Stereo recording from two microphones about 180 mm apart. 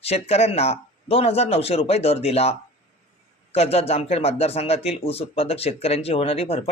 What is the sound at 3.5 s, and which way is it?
A man's voice, 35° left (ahead or behind).